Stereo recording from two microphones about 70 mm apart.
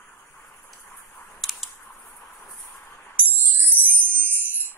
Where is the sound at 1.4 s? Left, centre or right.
Centre.